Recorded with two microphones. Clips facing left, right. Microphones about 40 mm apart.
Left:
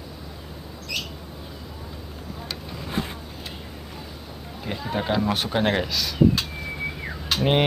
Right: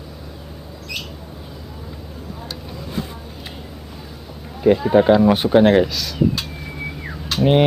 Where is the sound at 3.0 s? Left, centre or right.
Left.